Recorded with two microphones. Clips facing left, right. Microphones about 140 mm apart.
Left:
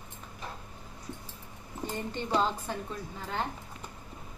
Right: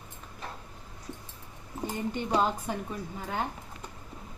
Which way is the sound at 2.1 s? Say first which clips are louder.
Right 1 dB; 15° right (ahead or behind).